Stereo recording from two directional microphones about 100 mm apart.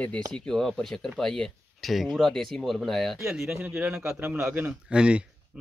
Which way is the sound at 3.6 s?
15° right (ahead or behind).